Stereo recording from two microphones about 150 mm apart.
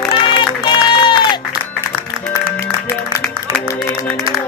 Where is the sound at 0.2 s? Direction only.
30° left (ahead or behind).